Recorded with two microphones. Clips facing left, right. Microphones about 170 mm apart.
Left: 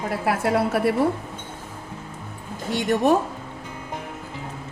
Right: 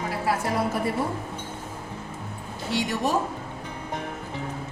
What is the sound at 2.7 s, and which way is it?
Speech, 50° left (ahead or behind).